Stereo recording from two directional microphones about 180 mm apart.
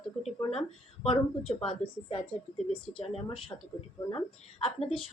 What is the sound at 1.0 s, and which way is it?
Speech, 30° left (ahead or behind).